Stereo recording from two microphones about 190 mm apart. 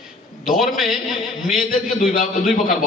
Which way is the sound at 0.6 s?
Centre (ahead or behind).